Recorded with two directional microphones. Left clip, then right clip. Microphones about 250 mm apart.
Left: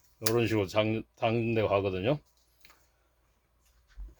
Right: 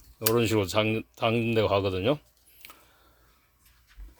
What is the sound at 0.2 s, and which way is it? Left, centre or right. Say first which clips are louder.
Speech: right 3 dB; right.